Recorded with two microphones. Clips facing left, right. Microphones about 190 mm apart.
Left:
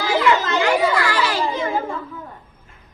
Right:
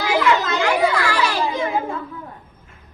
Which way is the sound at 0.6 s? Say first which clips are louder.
Even; 20° left (ahead or behind).